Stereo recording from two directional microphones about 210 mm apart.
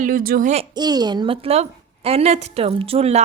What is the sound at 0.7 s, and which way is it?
A woman's voice, 20° right (ahead or behind).